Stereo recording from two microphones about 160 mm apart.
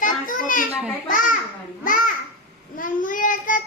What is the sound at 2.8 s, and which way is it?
Child singing, 55° left (ahead or behind).